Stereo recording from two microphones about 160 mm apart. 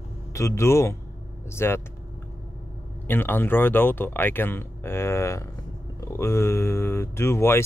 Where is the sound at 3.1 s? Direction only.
15° left (ahead or behind).